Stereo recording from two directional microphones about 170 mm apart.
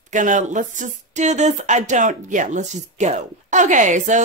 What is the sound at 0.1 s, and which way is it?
Speech, 45° right (ahead or behind).